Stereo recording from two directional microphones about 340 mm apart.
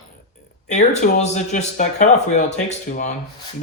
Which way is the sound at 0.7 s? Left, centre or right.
Left.